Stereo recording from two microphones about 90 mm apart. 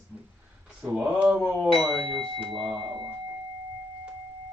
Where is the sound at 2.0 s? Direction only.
65° right (ahead or behind).